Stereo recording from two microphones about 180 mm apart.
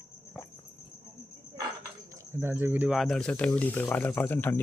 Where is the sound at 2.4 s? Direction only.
10° right (ahead or behind); by 4.5 s 10° left (ahead or behind).